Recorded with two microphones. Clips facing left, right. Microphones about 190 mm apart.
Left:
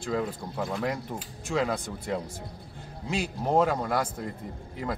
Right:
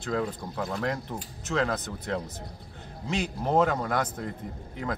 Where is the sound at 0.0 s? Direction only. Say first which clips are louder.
Even; 5° left (ahead or behind).